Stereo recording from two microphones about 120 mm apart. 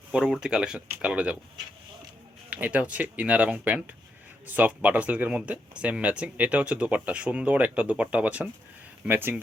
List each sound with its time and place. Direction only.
0.1 s speech: 5° right (ahead or behind)
2.5 s speech: 10° right (ahead or behind)